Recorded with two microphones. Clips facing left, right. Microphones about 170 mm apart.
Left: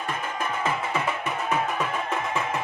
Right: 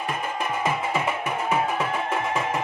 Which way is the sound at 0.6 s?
10° right (ahead or behind).